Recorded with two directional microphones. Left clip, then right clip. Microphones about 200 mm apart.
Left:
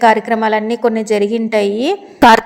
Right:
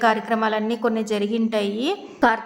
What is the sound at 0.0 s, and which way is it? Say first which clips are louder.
A woman's voice: left 8 dB; 20° left (ahead or behind).